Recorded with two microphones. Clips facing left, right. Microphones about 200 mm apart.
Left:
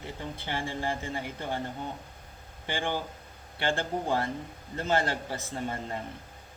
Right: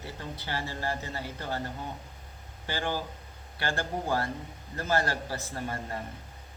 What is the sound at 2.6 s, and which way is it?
Speech, 20° left (ahead or behind).